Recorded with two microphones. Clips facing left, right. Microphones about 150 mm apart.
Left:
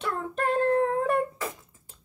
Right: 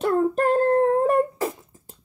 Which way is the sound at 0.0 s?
40° right (ahead or behind).